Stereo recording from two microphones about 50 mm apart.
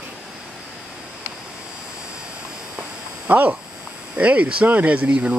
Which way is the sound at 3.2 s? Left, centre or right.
Right.